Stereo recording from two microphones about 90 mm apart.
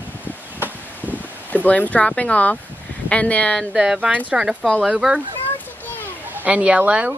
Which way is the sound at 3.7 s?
10° right (ahead or behind).